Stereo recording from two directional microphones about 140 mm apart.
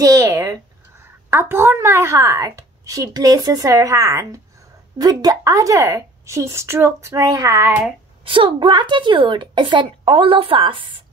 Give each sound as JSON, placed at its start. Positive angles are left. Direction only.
{"t": 0.0, "sound": "a woman's voice", "side_deg": -25}
{"t": 8.2, "sound": "a woman's voice", "side_deg": -40}